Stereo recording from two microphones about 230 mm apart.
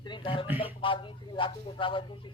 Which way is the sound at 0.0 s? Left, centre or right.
Centre.